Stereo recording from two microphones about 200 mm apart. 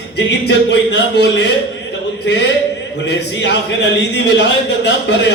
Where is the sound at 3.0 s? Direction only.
60° left (ahead or behind).